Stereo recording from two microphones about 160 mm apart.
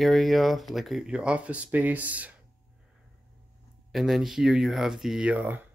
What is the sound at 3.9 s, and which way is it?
Speech, centre (ahead or behind).